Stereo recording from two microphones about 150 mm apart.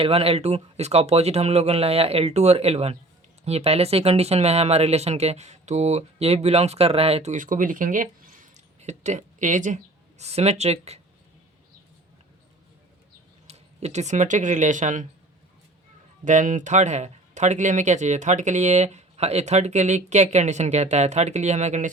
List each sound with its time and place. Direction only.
0.0 s speech: 40° right (ahead or behind); by 9.7 s 55° right (ahead or behind)
10.2 s speech: 45° right (ahead or behind)
13.5 s speech: 45° right (ahead or behind)
16.2 s speech: 55° right (ahead or behind)